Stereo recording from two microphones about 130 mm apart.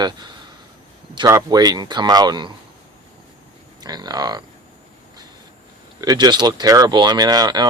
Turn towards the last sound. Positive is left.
turn(degrees=-30)  # may be behind; listen again after turning